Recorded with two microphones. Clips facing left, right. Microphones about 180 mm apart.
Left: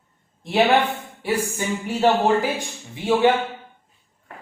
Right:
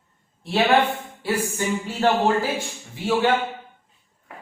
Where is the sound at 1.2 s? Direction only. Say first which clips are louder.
Left 1 dB; 15° left (ahead or behind).